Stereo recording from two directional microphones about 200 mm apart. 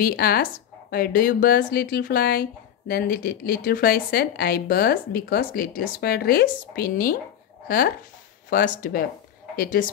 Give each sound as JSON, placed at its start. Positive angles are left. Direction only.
{"t": 0.0, "sound": "speech", "side_deg": 50}